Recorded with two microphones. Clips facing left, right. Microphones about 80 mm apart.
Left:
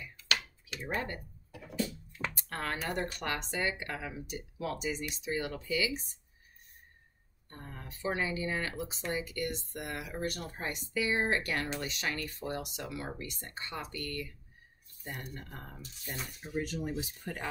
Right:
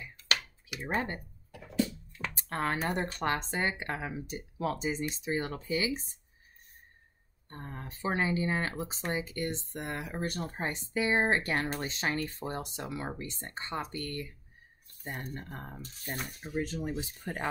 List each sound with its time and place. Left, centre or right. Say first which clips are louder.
0.8 s speech: right 3 dB; right
1.5 s a sound: right 4 dB; centre
2.3 s speech: right 8 dB; right
7.4 s speech: right 4 dB; right
16.0 s speech: right 3 dB; right
16.5 s speech: right 1 dB; right